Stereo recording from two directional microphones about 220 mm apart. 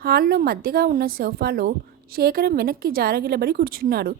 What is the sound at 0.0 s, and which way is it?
Speech, 45° right (ahead or behind).